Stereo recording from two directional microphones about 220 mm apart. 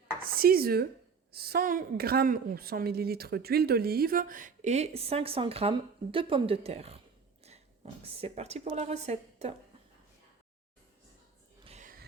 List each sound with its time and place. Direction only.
0.2 s a woman's voice: 40° right (ahead or behind)
8.1 s a woman's voice: 30° right (ahead or behind)
11.6 s a sound: 30° right (ahead or behind)